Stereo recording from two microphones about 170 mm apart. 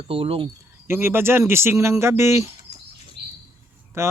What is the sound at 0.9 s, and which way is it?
Speech, 15° right (ahead or behind).